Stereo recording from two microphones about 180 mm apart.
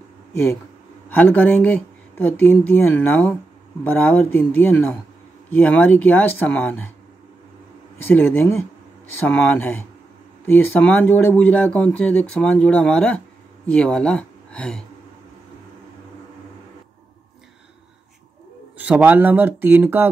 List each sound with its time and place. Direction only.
0.3 s speech: 15° left (ahead or behind)
8.1 s speech: 10° left (ahead or behind)
18.8 s speech: 10° right (ahead or behind)